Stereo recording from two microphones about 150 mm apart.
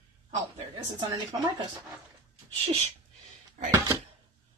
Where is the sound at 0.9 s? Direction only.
30° right (ahead or behind).